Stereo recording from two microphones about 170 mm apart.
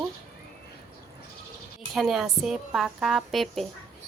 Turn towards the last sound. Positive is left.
turn(degrees=0)  # may be behind; listen again after turning